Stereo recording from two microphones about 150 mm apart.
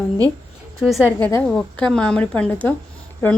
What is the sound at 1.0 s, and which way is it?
A woman's voice, 15° left (ahead or behind).